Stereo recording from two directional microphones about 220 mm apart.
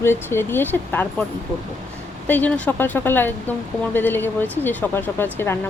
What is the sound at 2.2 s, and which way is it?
Speech, 5° left (ahead or behind).